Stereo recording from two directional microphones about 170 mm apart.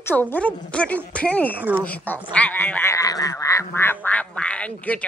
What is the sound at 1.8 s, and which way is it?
Speech, 10° left (ahead or behind).